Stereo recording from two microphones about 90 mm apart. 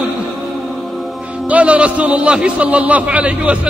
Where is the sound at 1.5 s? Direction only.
15° right (ahead or behind).